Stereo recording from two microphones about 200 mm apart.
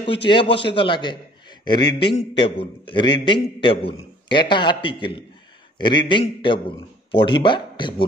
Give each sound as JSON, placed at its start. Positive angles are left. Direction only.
{"t": 0.3, "sound": "a man's voice", "side_deg": 25}